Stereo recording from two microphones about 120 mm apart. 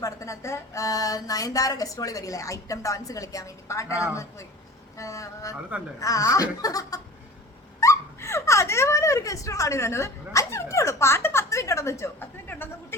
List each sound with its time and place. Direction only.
0.0 s a woman's voice: 25° left (ahead or behind)